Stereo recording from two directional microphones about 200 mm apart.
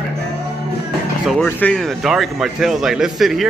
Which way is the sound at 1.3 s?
5° left (ahead or behind).